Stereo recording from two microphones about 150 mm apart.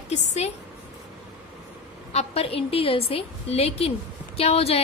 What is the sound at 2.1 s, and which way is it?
A woman's voice, 40° left (ahead or behind).